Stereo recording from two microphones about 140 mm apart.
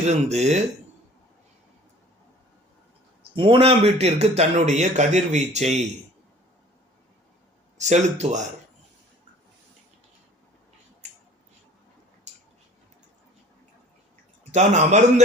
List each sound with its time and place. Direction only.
0.0 s a man's voice: 50° right (ahead or behind)
3.3 s a man's voice: 40° right (ahead or behind)
7.8 s speech: 55° right (ahead or behind)
11.0 s finger snapping: 55° right (ahead or behind)
12.3 s a sound: 55° right (ahead or behind)
14.5 s speech: 60° right (ahead or behind)